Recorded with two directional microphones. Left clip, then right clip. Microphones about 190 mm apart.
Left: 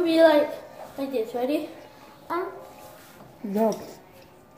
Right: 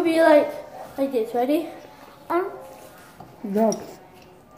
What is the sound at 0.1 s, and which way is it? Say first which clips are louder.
A woman's voice: right 2 dB; 30° right (ahead or behind).